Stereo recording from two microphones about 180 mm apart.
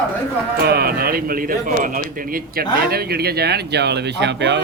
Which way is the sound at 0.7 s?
60° right (ahead or behind).